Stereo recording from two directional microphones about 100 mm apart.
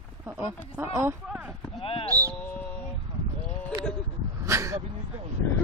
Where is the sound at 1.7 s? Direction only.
65° left (ahead or behind).